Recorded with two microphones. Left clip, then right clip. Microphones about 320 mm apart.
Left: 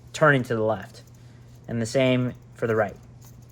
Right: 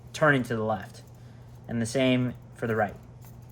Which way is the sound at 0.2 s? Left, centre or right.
Centre.